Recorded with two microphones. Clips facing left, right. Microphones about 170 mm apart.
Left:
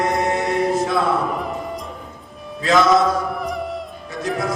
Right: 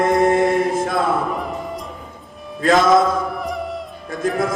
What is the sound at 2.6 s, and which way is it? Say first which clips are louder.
Music: right 2 dB; 50° right (ahead or behind).